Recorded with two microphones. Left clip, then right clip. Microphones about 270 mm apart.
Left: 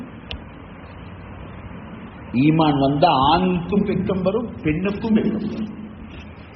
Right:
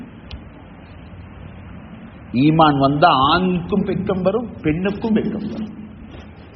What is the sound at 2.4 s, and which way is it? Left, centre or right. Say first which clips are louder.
A man's voice: right 4 dB; right.